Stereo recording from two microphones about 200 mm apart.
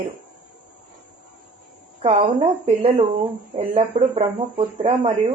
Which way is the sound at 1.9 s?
30° right (ahead or behind).